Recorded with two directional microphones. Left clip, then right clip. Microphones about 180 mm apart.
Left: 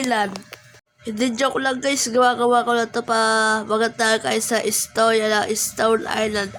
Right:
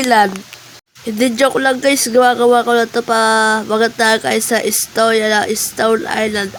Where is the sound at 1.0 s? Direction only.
25° right (ahead or behind).